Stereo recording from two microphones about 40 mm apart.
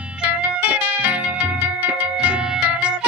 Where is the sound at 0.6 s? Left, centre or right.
Right.